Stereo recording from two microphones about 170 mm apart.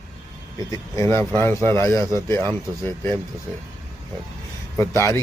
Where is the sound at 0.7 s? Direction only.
15° left (ahead or behind).